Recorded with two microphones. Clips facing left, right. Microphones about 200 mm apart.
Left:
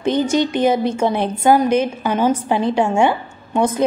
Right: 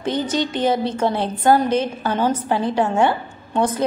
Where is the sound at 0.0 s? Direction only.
15° left (ahead or behind).